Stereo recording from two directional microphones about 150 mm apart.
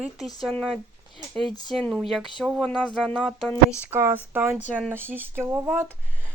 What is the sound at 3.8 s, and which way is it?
Speech, 15° right (ahead or behind).